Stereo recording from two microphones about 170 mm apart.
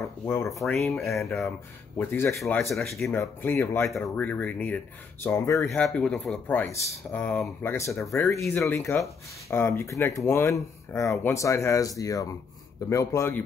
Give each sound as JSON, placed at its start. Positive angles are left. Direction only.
{"t": 0.2, "sound": "speech", "side_deg": 15}
{"t": 0.7, "sound": "speech", "side_deg": 0}
{"t": 2.0, "sound": "speech", "side_deg": 15}
{"t": 2.7, "sound": "speech", "side_deg": 0}
{"t": 3.1, "sound": "speech", "side_deg": 15}
{"t": 5.8, "sound": "speech", "side_deg": 5}